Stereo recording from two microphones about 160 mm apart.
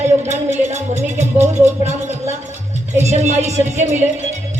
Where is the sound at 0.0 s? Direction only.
45° right (ahead or behind).